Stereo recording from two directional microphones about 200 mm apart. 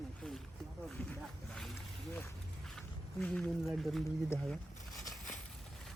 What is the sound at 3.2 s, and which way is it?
Speech, 5° left (ahead or behind).